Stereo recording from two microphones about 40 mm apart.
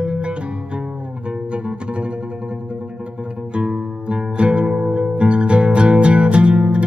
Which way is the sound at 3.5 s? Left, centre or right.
Right.